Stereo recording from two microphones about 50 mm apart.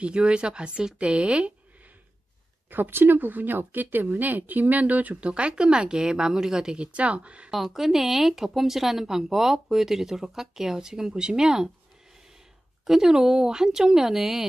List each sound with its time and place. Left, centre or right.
0.0 s speech: right
2.7 s speech: right
7.5 s speech: centre
12.8 s speech: centre